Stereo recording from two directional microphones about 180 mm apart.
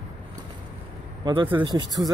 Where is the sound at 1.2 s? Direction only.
25° right (ahead or behind).